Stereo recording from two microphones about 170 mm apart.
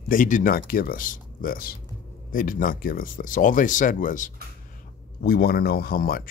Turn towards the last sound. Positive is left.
turn(degrees=60)  # may be behind; listen again after turning